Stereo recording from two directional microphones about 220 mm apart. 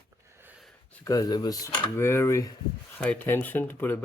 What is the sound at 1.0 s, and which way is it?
Speech, 15° left (ahead or behind).